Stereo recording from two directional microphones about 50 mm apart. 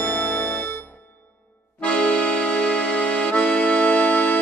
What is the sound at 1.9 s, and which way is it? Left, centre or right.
Accordion, left.